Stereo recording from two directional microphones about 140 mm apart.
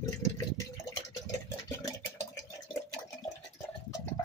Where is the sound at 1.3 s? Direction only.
25° left (ahead or behind).